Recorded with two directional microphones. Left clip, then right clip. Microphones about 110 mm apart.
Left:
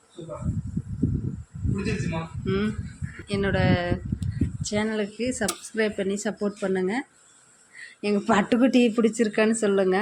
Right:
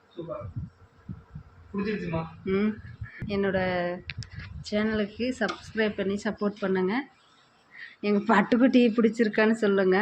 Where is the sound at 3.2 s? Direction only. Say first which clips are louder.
Left 2 dB; 20° left (ahead or behind).